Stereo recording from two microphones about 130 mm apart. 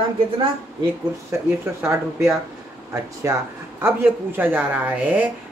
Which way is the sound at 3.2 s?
25° right (ahead or behind).